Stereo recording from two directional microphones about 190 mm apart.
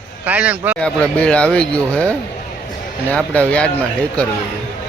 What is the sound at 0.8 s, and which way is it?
Speech, 5° left (ahead or behind).